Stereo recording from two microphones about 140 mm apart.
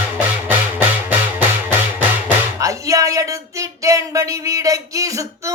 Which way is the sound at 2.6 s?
25° right (ahead or behind).